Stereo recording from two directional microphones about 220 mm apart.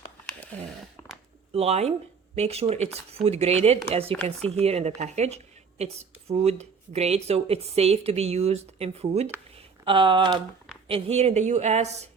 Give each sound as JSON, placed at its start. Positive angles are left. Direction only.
{"t": 1.5, "sound": "speech", "side_deg": -30}
{"t": 4.1, "sound": "speech", "side_deg": 5}
{"t": 4.4, "sound": "a woman's voice", "side_deg": -30}